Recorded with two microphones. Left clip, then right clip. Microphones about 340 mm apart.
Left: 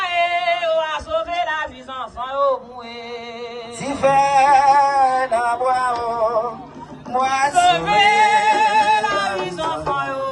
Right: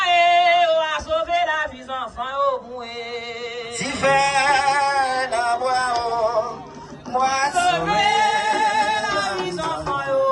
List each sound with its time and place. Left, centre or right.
0.0 s a sound: centre
3.8 s male singing: centre
7.1 s singing: left
9.9 s music: left